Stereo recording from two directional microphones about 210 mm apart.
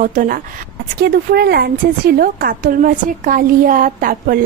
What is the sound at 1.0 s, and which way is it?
A woman's voice, 50° right (ahead or behind).